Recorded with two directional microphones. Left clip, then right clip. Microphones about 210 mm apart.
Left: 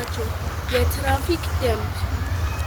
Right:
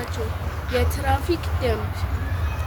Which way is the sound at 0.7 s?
30° right (ahead or behind).